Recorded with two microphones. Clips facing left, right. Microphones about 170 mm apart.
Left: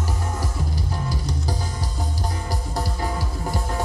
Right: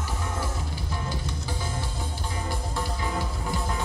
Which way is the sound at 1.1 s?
40° left (ahead or behind).